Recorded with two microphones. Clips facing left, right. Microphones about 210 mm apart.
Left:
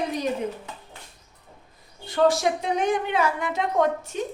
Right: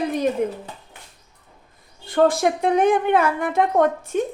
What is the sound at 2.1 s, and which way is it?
A woman's voice, 50° right (ahead or behind).